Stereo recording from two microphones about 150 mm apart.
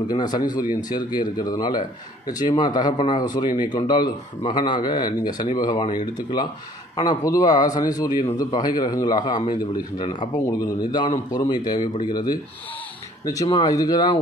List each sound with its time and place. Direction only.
0.1 s a man's voice: 30° left (ahead or behind)